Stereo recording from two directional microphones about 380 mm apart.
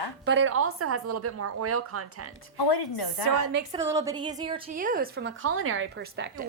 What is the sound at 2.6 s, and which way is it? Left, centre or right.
Speech, left.